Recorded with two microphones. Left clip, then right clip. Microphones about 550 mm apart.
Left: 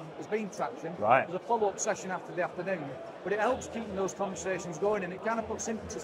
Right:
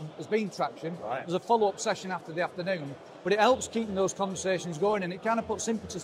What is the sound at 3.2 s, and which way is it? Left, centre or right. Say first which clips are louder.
Speech: right 6 dB; right.